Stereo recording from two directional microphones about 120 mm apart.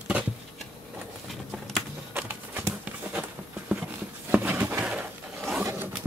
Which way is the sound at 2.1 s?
15° right (ahead or behind).